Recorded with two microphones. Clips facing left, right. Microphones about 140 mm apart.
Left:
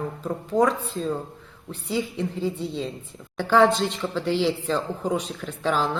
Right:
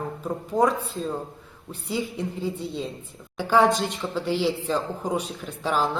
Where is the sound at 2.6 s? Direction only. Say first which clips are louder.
Left 2 dB; 45° right (ahead or behind).